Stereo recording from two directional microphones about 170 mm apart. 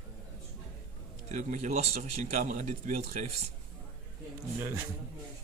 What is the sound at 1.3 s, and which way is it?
A man's voice, 40° right (ahead or behind).